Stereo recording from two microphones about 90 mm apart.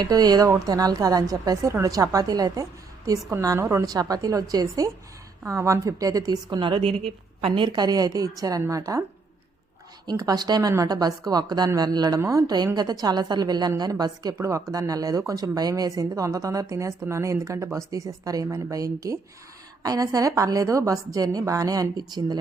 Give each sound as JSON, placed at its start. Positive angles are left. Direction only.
{"t": 0.0, "sound": "a woman's voice", "side_deg": -50}
{"t": 3.8, "sound": "a woman's voice", "side_deg": -45}
{"t": 10.1, "sound": "a woman's voice", "side_deg": -50}
{"t": 14.3, "sound": "a woman's voice", "side_deg": -35}